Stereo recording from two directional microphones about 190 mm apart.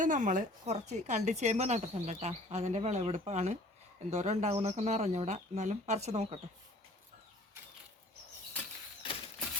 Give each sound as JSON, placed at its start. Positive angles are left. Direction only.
{"t": 0.0, "sound": "speech", "side_deg": -40}